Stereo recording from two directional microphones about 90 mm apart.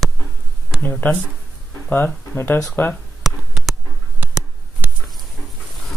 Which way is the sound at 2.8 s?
25° left (ahead or behind).